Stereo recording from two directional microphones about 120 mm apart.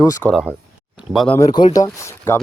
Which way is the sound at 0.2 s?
5° left (ahead or behind).